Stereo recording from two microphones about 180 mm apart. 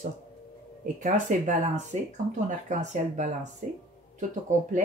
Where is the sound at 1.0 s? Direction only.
45° right (ahead or behind).